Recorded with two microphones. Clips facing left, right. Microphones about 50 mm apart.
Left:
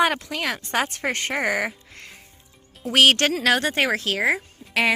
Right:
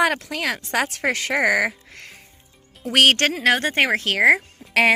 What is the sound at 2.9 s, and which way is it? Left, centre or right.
Speech, right.